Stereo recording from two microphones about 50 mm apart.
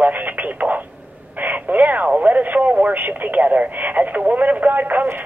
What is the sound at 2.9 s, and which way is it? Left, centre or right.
Speech, right.